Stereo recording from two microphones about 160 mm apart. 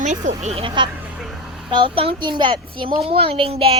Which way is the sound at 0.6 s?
30° right (ahead or behind).